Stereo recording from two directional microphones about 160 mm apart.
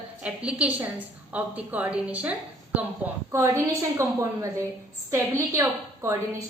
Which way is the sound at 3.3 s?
20° right (ahead or behind).